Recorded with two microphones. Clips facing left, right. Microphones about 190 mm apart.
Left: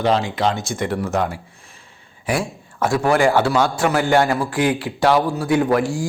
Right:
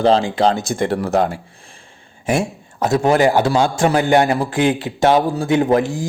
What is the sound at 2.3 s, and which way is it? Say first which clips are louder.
A man's voice: right 3 dB; 25° right (ahead or behind).